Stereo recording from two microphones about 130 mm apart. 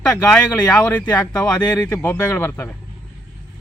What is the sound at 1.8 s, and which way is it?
Speech, 20° left (ahead or behind).